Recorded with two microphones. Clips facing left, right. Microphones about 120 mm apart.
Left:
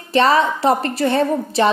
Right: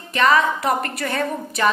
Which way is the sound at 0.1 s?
30° left (ahead or behind).